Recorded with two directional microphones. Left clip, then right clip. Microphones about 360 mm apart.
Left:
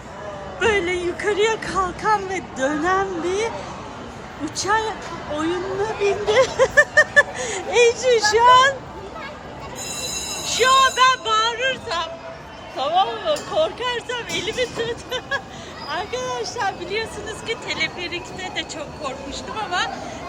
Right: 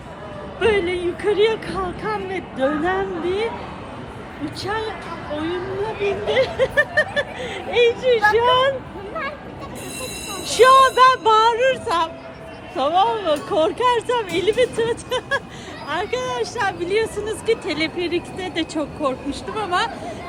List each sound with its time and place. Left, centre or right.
0.6 s speech: centre
4.5 s a woman's voice: centre
6.0 s speech: centre
7.3 s speech: left
7.9 s speech: centre
10.5 s speech: centre